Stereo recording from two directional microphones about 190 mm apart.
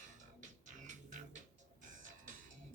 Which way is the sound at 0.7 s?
40° right (ahead or behind).